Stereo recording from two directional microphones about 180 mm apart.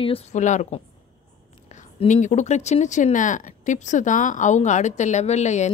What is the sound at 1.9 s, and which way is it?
A woman's voice, 45° left (ahead or behind).